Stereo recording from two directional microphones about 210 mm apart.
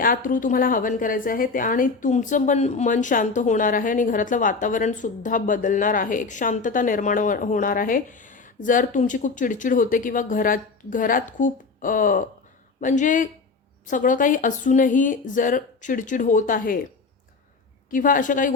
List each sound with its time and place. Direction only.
0.0 s a woman's voice: 40° left (ahead or behind)
17.9 s a woman's voice: 40° left (ahead or behind)